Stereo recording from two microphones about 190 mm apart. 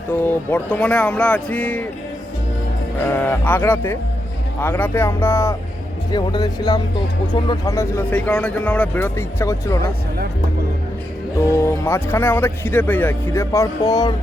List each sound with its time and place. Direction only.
0.1 s speech: 10° left (ahead or behind)
3.1 s speech: 10° left (ahead or behind)
11.3 s speech: 15° left (ahead or behind)